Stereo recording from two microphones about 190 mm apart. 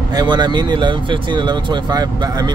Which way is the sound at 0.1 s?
20° right (ahead or behind).